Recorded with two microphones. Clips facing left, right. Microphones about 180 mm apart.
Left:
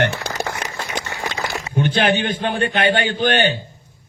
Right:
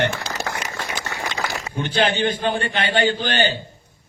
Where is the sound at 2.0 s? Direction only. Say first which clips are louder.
Right 1 dB; 60° left (ahead or behind).